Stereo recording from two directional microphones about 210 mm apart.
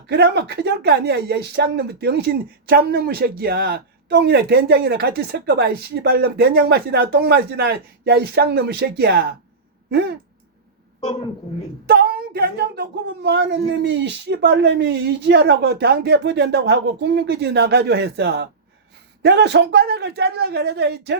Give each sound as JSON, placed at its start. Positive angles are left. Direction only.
{"t": 0.1, "sound": "speech", "side_deg": -50}
{"t": 11.9, "sound": "speech", "side_deg": -45}